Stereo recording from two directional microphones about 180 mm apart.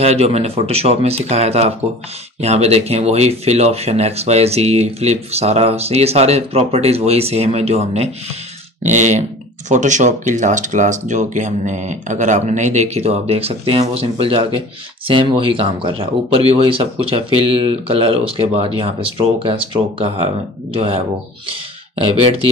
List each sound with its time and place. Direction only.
0.0 s speech: 35° right (ahead or behind)